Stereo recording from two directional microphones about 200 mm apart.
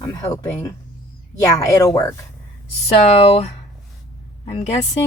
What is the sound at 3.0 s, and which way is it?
Speech, 30° left (ahead or behind).